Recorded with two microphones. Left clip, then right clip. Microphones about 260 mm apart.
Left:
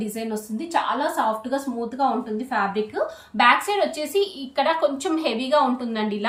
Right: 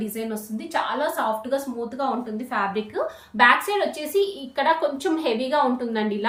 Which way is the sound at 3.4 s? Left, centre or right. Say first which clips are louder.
Even; centre.